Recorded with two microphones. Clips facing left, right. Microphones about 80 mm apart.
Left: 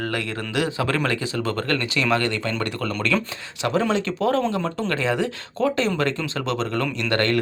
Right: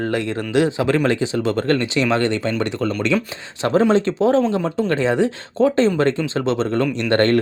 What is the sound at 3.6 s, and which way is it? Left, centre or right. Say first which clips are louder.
Speech: right 6 dB; right.